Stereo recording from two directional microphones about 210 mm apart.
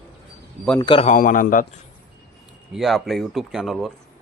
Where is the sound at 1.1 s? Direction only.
40° left (ahead or behind).